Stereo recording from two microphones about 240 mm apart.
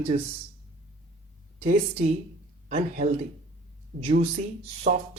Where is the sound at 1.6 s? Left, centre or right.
Right.